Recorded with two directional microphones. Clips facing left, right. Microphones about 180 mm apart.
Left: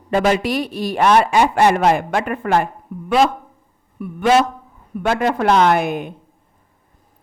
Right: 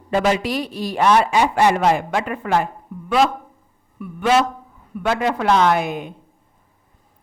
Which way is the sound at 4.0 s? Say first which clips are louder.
Left 2 dB; 45° left (ahead or behind).